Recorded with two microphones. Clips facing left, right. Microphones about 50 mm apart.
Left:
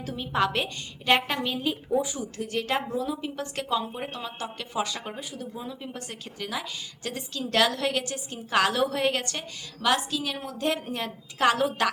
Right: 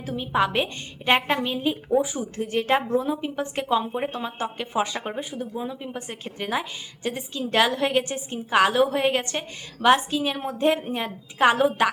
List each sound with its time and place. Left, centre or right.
0.0 s a woman's voice: centre
6.2 s speech: right
7.0 s a woman's voice: centre